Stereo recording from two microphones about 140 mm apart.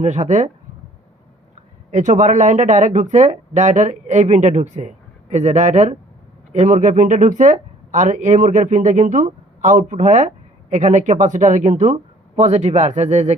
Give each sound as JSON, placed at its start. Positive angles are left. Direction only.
{"t": 0.0, "sound": "speech", "side_deg": -55}
{"t": 1.9, "sound": "speech", "side_deg": -65}